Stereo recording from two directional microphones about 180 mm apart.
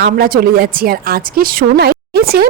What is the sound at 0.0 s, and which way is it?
A woman's voice, 55° right (ahead or behind).